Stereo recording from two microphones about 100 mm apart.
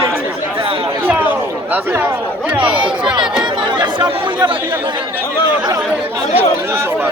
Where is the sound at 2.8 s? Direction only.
50° right (ahead or behind).